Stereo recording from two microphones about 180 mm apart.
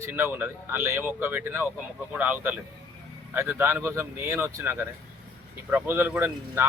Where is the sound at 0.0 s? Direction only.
10° right (ahead or behind).